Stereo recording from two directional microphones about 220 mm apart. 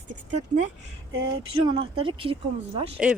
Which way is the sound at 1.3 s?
20° right (ahead or behind).